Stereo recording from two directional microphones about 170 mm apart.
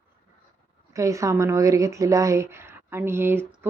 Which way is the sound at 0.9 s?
20° right (ahead or behind).